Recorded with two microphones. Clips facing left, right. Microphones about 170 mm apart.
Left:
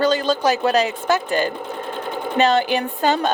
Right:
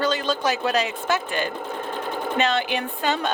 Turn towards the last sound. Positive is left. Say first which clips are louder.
# left 5 dB
turn(degrees=40)  # may be behind; listen again after turning